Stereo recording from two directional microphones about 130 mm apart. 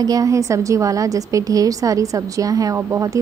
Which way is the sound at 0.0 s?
25° right (ahead or behind).